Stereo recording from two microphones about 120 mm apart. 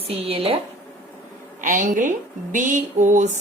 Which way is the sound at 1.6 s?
90° right.